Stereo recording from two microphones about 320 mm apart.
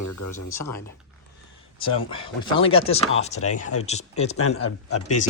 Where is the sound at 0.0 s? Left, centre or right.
Left.